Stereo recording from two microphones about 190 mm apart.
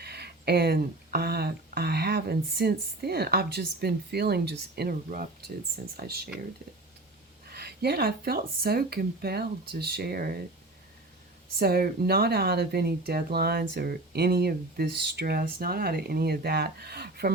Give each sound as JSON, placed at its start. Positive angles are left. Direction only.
{"t": 0.0, "sound": "speech", "side_deg": -55}
{"t": 7.5, "sound": "speech", "side_deg": -55}
{"t": 11.6, "sound": "speech", "side_deg": -55}